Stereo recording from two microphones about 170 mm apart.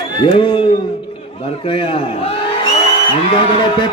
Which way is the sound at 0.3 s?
30° left (ahead or behind).